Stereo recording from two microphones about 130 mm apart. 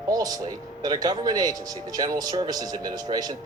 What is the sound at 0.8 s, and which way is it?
Speech, 30° right (ahead or behind).